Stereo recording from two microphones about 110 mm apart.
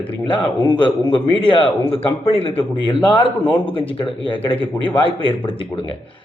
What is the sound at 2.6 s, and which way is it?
Speech, 45° left (ahead or behind).